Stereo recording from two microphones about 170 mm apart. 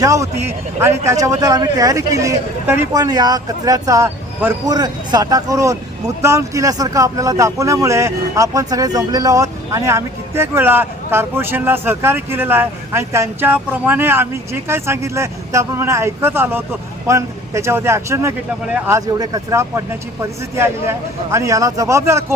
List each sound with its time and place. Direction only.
0.0 s a man's voice: 20° right (ahead or behind)
21.3 s a man's voice: 20° right (ahead or behind)